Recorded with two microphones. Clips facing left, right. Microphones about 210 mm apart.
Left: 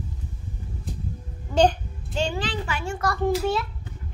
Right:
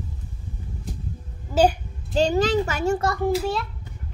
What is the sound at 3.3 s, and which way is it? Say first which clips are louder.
Speech: left 1 dB; centre (ahead or behind).